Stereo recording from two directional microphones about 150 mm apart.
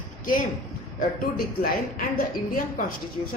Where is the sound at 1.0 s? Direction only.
80° left.